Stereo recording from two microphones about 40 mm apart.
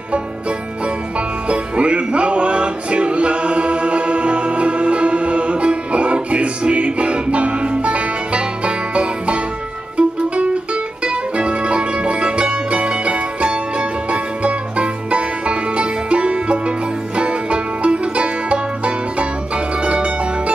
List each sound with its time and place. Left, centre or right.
1.5 s music: right